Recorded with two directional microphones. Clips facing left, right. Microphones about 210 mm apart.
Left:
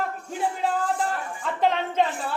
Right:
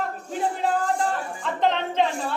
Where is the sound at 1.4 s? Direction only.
5° left (ahead or behind).